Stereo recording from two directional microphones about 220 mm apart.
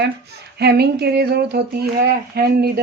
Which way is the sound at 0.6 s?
45° right (ahead or behind).